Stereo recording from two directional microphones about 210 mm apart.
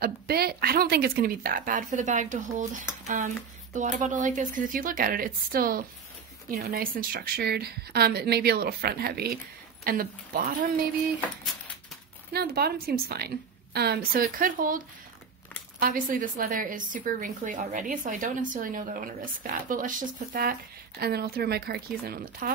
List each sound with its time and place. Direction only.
0.0 s a woman's voice: 45° right (ahead or behind)
12.3 s a woman's voice: 50° right (ahead or behind)
15.8 s a woman's voice: 40° right (ahead or behind)